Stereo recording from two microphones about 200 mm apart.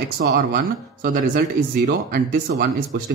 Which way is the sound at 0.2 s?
50° right (ahead or behind).